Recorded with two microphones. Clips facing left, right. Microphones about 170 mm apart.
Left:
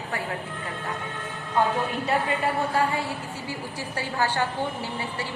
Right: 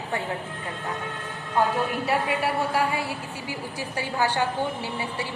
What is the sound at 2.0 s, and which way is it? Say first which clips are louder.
A woman's voice: left 2 dB; 10° right (ahead or behind).